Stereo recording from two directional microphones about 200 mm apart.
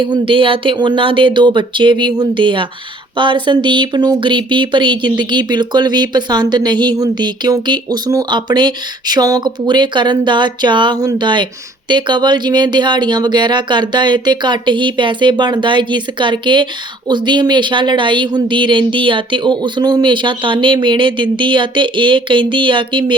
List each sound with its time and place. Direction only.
0.0 s speech: 25° right (ahead or behind)